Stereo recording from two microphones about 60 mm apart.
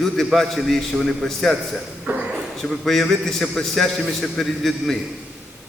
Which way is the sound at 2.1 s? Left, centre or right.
Right.